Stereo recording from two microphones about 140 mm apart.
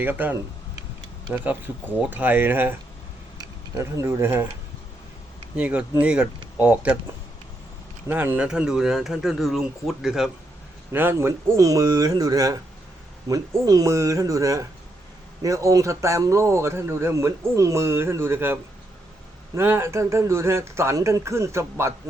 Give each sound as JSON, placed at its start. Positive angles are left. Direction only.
{"t": 0.0, "sound": "speech", "side_deg": -15}
{"t": 5.5, "sound": "speech", "side_deg": -10}
{"t": 8.0, "sound": "speech", "side_deg": -15}
{"t": 10.9, "sound": "a man's voice", "side_deg": -15}